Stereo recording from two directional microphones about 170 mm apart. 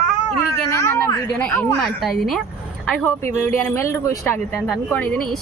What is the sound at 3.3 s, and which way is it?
A woman's voice, 15° left (ahead or behind).